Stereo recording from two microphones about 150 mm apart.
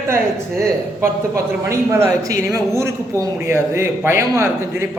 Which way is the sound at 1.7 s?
15° right (ahead or behind).